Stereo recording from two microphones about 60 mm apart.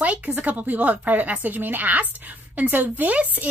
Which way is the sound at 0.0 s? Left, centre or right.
Right.